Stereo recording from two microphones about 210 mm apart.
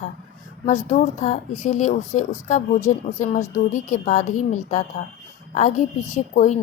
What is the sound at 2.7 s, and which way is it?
Speech, 15° left (ahead or behind).